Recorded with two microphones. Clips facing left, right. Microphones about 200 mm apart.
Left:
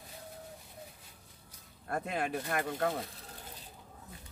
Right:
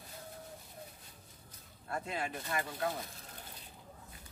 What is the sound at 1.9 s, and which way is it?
Speech, 55° left (ahead or behind).